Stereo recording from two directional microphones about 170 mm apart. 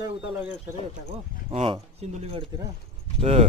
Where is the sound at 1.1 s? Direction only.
30° right (ahead or behind).